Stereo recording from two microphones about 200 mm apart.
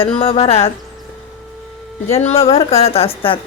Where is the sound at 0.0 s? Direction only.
25° left (ahead or behind).